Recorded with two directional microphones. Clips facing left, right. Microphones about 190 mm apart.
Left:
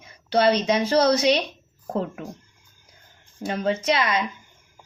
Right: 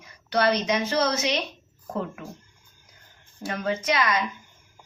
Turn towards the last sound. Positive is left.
turn(degrees=25)  # may be behind; listen again after turning